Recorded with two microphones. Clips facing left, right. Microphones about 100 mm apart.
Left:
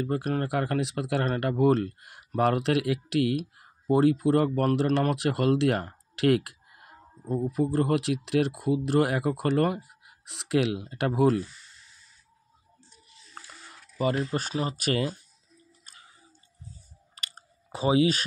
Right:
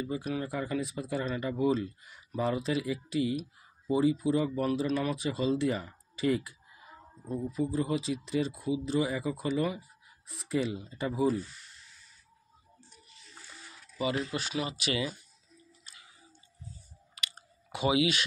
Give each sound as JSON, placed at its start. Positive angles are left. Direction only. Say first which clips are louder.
{"t": 0.0, "sound": "speech", "louder": "left 5 dB", "side_deg": 60}
{"t": 13.9, "sound": "speech", "louder": "left 5 dB", "side_deg": 45}
{"t": 15.8, "sound": "a sound", "louder": "left 5 dB", "side_deg": 40}
{"t": 17.1, "sound": "clicking", "louder": "right 1 dB", "side_deg": 40}